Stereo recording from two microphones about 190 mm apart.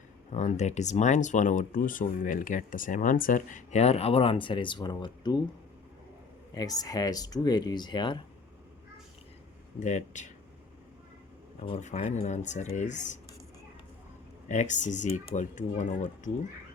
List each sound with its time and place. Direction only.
0.3 s speech: 40° left (ahead or behind)
6.5 s speech: 20° left (ahead or behind)
9.8 s speech: 40° left (ahead or behind)
11.6 s speech: 35° left (ahead or behind)
14.4 s speech: 40° left (ahead or behind)